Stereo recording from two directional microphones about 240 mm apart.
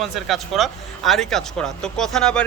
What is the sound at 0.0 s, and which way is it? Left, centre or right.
Speech, centre.